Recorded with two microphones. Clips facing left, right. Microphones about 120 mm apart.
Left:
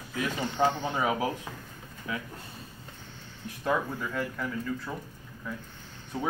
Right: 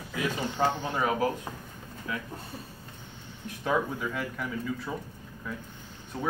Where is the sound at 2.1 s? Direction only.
25° left (ahead or behind).